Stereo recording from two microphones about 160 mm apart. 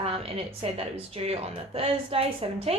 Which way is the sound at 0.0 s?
35° right (ahead or behind).